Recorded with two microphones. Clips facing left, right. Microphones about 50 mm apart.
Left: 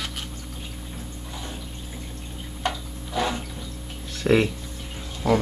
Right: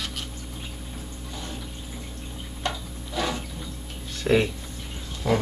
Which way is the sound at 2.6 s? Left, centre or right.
Centre.